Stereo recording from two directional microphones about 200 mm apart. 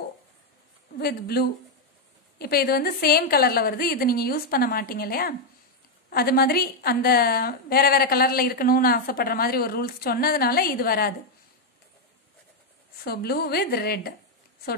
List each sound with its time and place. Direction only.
0.9 s a woman's voice: 50° left (ahead or behind)
13.0 s a woman's voice: 50° left (ahead or behind)